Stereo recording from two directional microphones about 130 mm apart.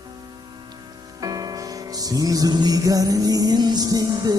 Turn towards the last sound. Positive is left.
turn(degrees=-30)  # may be behind; listen again after turning